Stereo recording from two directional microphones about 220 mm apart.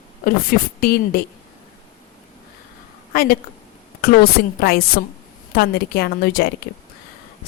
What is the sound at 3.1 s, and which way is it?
A woman's voice, 40° left (ahead or behind).